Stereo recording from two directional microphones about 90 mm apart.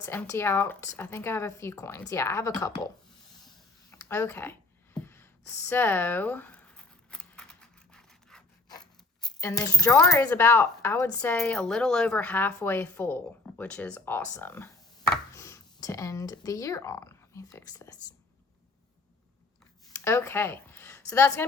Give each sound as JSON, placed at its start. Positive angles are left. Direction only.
{"t": 0.3, "sound": "speech", "side_deg": 30}
{"t": 4.1, "sound": "speech", "side_deg": 25}
{"t": 4.9, "sound": "zipper", "side_deg": 25}
{"t": 9.4, "sound": "speech", "side_deg": 40}
{"t": 10.3, "sound": "speech", "side_deg": 25}
{"t": 11.4, "sound": "speech", "side_deg": 10}
{"t": 13.7, "sound": "speech", "side_deg": 15}
{"t": 19.9, "sound": "a sound", "side_deg": 30}
{"t": 21.1, "sound": "speech", "side_deg": 35}